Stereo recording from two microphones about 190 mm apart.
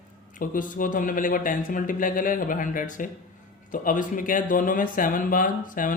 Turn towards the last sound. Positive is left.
turn(degrees=45)  # may be behind; listen again after turning